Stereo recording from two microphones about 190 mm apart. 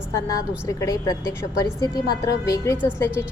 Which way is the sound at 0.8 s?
15° left (ahead or behind).